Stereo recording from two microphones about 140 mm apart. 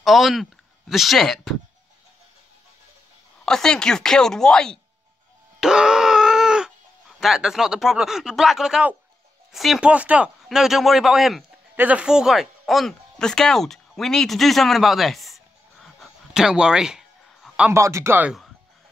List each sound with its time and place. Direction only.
0.0 s speech: centre (ahead or behind)
3.4 s speech: 5° left (ahead or behind)
5.6 s a sound: 5° right (ahead or behind)
9.5 s speech: centre (ahead or behind)
17.7 s speech: 20° right (ahead or behind)